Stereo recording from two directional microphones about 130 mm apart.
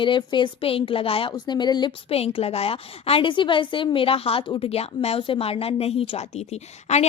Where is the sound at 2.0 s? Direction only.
50° left (ahead or behind).